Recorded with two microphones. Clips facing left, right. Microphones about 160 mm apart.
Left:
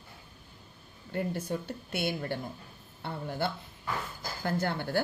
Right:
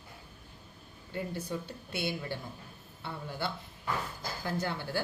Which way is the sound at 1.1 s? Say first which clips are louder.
Left 4 dB; 50° left (ahead or behind).